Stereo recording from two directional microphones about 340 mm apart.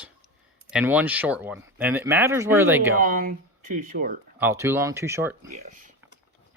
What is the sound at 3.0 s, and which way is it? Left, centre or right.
Speech, right.